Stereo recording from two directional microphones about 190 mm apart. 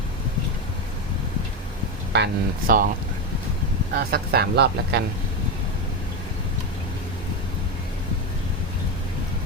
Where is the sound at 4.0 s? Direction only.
55° right (ahead or behind).